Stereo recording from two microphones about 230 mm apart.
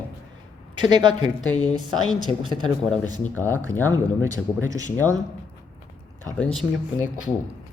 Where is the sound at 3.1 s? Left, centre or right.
Left.